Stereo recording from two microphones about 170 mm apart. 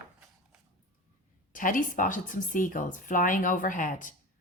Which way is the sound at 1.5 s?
50° left (ahead or behind).